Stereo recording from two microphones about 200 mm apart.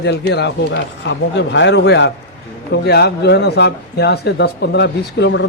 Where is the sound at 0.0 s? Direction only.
60° left (ahead or behind).